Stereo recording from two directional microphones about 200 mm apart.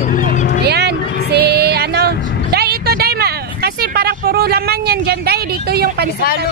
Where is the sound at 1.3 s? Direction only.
55° right (ahead or behind).